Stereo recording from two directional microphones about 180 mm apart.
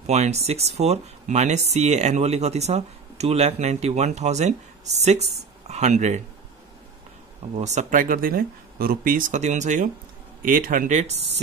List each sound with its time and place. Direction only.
0.0 s speech: 40° right (ahead or behind)
5.7 s speech: 40° right (ahead or behind)
7.5 s speech: 40° right (ahead or behind)